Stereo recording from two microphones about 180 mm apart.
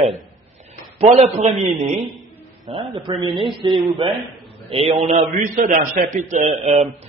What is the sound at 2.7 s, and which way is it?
Speech, 25° right (ahead or behind).